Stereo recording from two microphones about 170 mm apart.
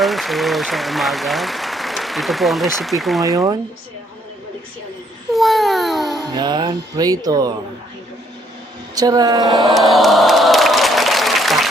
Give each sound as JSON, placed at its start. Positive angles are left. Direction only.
{"t": 0.0, "sound": "speech", "side_deg": 0}
{"t": 3.2, "sound": "speech", "side_deg": -20}
{"t": 5.3, "sound": "babbling", "side_deg": 0}
{"t": 6.3, "sound": "speech", "side_deg": -25}
{"t": 9.0, "sound": "speech", "side_deg": -20}
{"t": 9.9, "sound": "applause", "side_deg": 0}